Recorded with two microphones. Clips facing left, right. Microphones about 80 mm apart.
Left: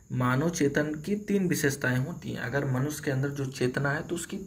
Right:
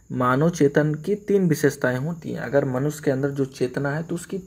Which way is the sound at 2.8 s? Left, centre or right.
Right.